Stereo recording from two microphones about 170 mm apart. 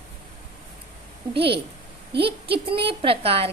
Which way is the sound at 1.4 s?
75° right (ahead or behind).